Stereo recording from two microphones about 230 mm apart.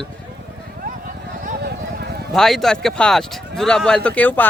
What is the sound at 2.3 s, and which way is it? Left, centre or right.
Speech, centre.